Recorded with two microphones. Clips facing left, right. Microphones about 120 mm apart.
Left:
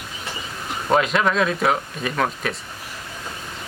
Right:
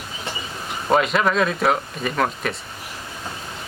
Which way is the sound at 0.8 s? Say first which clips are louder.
Even; centre (ahead or behind).